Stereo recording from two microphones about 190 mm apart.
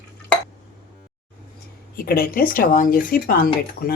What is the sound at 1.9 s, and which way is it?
Speech, 50° left (ahead or behind).